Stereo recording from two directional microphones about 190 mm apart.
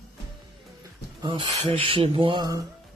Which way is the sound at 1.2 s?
25° right (ahead or behind).